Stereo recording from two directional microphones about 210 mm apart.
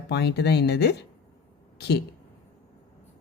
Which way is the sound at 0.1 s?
50° left (ahead or behind).